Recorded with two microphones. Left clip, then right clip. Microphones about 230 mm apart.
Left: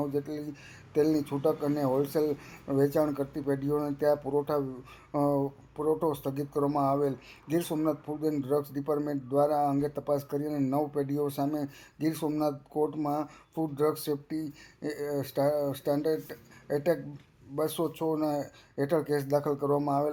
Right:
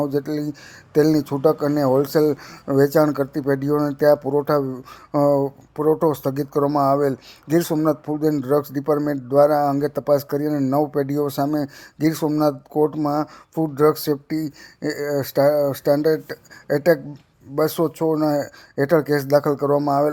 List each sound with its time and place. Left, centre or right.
0.0 s speech: right